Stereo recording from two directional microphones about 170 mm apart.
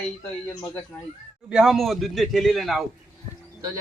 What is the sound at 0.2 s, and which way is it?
Speech, 10° left (ahead or behind).